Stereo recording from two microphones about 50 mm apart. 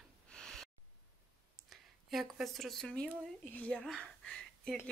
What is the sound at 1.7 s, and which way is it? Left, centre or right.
Speech, centre.